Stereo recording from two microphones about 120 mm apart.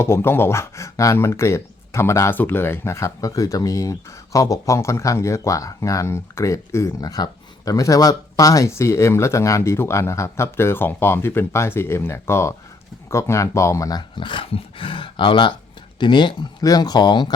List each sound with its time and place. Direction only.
0.0 s speech: 20° left (ahead or behind)
14.2 s speech: 45° left (ahead or behind)